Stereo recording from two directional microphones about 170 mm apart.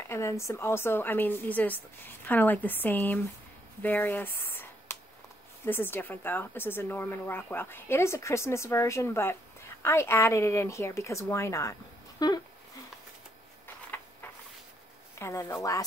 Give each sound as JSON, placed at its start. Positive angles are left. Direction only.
{"t": 0.1, "sound": "speech", "side_deg": 15}
{"t": 15.1, "sound": "speech", "side_deg": 15}